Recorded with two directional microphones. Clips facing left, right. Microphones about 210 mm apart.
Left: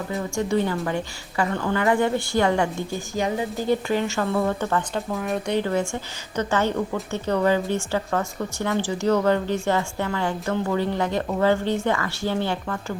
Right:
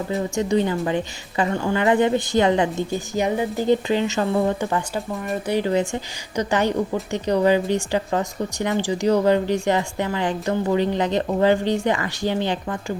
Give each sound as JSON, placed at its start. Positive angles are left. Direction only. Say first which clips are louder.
{"t": 0.1, "sound": "a woman's voice", "louder": "right 3 dB", "side_deg": -20}
{"t": 3.7, "sound": "a woman's voice", "louder": "right 3 dB", "side_deg": -20}
{"t": 4.9, "sound": "speech", "louder": "even", "side_deg": 0}
{"t": 5.5, "sound": "a woman's voice", "louder": "right 5 dB", "side_deg": -15}